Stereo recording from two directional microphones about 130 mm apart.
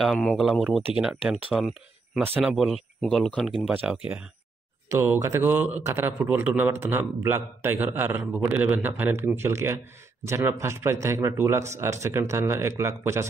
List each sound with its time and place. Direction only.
0.0 s speech: centre (ahead or behind)
2.2 s a man's voice: 15° right (ahead or behind)
2.5 s speech: centre (ahead or behind)
4.8 s a man's voice: 20° right (ahead or behind)